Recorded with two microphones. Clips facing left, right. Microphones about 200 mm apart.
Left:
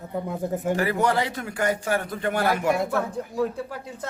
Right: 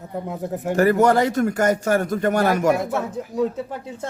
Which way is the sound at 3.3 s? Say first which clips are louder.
Right 4 dB; 25° right (ahead or behind).